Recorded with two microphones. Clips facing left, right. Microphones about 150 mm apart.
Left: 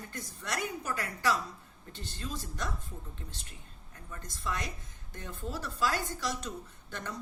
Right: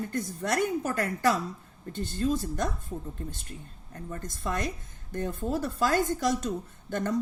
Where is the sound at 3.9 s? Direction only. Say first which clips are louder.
Right 9 dB; 45° right (ahead or behind).